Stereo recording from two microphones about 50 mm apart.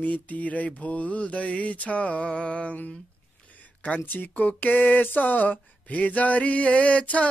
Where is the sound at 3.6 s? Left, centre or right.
Left.